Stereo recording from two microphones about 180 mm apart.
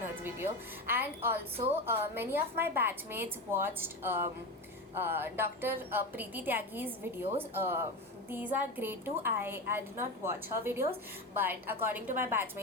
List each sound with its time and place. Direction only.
0.9 s a woman's voice: 10° right (ahead or behind)
1.5 s a woman's voice: 30° right (ahead or behind)
1.9 s a woman's voice: 10° right (ahead or behind)